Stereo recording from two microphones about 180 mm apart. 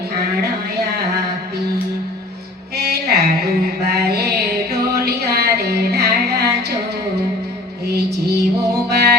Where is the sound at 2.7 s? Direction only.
65° right (ahead or behind).